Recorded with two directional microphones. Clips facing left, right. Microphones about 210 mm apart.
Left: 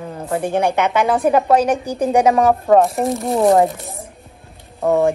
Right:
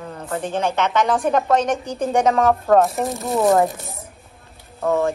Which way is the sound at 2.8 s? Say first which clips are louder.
Left 2 dB; centre (ahead or behind).